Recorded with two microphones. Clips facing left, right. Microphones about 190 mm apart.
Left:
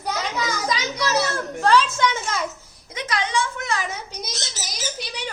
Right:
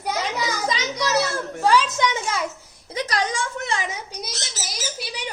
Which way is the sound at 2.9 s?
40° right (ahead or behind).